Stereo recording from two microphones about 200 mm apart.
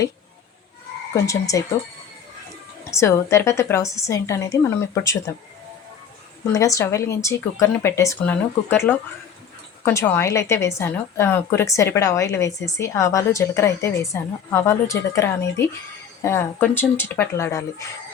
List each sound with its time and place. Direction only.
1.1 s a woman's voice: 15° left (ahead or behind)
2.9 s a woman's voice: 15° left (ahead or behind)
6.5 s a woman's voice: 15° left (ahead or behind)